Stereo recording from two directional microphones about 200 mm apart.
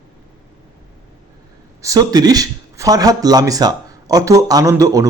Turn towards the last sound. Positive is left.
turn(degrees=-15)  # may be behind; listen again after turning